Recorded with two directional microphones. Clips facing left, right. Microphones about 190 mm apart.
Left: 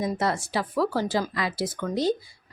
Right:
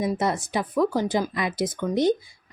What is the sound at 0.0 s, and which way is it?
A woman's voice, 15° right (ahead or behind).